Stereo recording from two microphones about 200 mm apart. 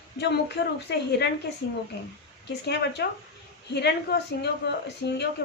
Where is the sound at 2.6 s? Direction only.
55° left (ahead or behind).